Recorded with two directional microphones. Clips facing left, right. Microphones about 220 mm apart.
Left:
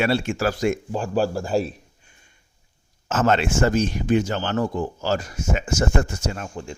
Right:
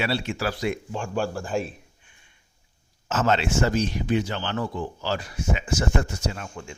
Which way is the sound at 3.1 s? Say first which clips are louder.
Left 3 dB; 50° left (ahead or behind).